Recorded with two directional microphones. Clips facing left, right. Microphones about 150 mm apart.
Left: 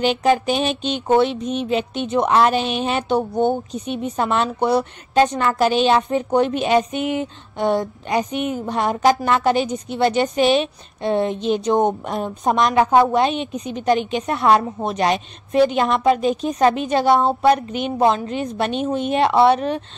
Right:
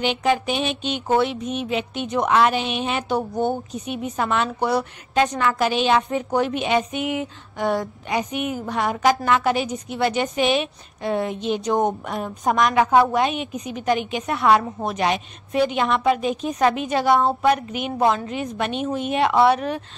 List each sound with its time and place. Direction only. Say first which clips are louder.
0.0 s a woman's voice: left 4 dB; 40° left (ahead or behind)